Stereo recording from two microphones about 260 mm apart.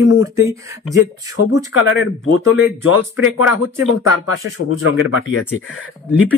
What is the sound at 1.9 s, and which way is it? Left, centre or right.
Speech, left.